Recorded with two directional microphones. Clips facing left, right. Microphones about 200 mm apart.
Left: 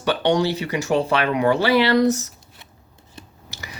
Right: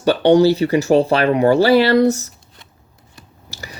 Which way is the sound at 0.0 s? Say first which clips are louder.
Right 8 dB; 35° right (ahead or behind).